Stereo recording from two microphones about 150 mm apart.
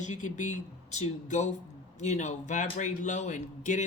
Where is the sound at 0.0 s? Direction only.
55° left (ahead or behind).